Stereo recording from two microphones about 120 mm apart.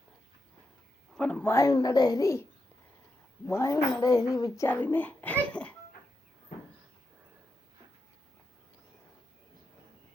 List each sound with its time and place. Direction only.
1.1 s speech: 10° left (ahead or behind)
1.5 s speech: 25° left (ahead or behind)
4.7 s a child's voice: 15° left (ahead or behind)